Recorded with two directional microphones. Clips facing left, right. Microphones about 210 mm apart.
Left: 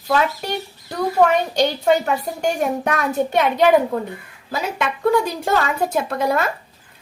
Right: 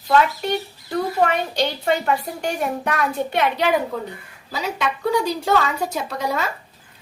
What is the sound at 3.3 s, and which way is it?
Speech, 50° left (ahead or behind).